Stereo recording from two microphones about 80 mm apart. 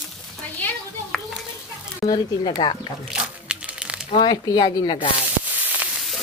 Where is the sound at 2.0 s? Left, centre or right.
Left.